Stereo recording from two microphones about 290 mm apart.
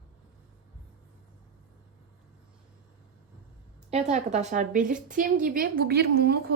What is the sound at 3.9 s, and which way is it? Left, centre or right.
A woman's voice, right.